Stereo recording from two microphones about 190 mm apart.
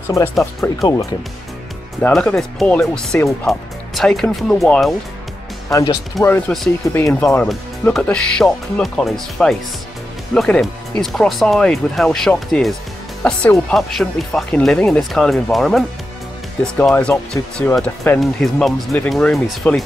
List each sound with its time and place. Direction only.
0.1 s speech: 15° left (ahead or behind)
2.0 s speech: 5° left (ahead or behind)
6.2 s speech: 10° left (ahead or behind)